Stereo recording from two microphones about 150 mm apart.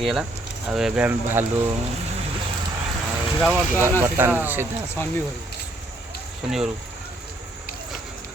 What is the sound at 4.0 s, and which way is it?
Speech, 15° right (ahead or behind).